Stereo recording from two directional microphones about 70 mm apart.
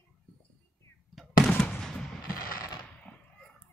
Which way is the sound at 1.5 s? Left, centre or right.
Centre.